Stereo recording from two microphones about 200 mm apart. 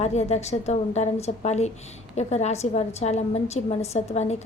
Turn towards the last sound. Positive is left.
turn(degrees=35)  # may be behind; listen again after turning